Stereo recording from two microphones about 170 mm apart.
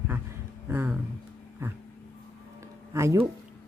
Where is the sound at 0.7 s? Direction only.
15° right (ahead or behind).